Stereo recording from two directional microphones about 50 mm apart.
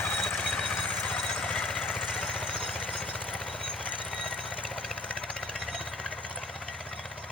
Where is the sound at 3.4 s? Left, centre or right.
Centre.